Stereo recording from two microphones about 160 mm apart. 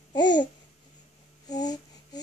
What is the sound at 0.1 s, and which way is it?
Babbling, 25° left (ahead or behind).